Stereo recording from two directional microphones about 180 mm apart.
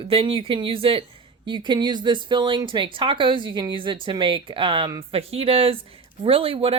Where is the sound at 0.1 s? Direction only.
30° right (ahead or behind).